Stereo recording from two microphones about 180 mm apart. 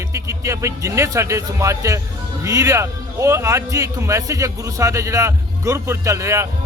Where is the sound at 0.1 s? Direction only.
15° right (ahead or behind).